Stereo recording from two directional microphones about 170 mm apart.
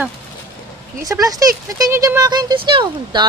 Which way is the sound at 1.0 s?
20° right (ahead or behind).